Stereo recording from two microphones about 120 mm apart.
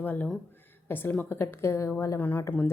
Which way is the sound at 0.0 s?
15° left (ahead or behind).